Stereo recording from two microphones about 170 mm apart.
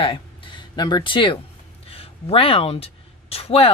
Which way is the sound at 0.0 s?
30° left (ahead or behind).